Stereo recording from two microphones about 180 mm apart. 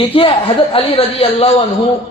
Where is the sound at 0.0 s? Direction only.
30° left (ahead or behind).